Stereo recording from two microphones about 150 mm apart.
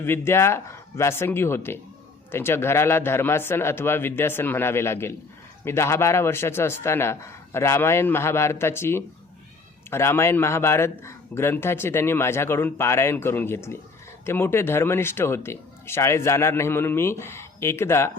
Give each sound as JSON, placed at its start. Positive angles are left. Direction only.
{"t": 0.0, "sound": "speech", "side_deg": 15}